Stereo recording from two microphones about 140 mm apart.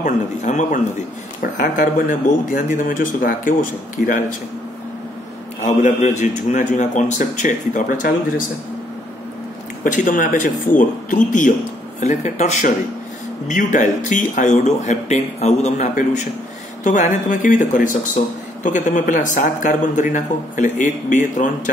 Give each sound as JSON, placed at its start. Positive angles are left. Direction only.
{"t": 0.0, "sound": "speech", "side_deg": 60}
{"t": 1.4, "sound": "speech", "side_deg": 75}
{"t": 5.6, "sound": "speech", "side_deg": 65}
{"t": 9.8, "sound": "speech", "side_deg": 75}
{"t": 10.8, "sound": "speech", "side_deg": 65}